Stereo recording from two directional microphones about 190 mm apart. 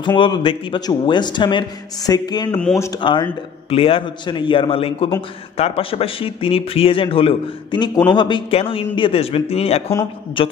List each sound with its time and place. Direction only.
0.0 s a man's voice: 25° left (ahead or behind)
2.5 s speech: 5° left (ahead or behind)
2.8 s a man's voice: 20° left (ahead or behind)